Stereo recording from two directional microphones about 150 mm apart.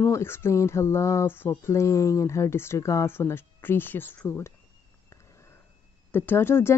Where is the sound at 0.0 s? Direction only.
15° left (ahead or behind).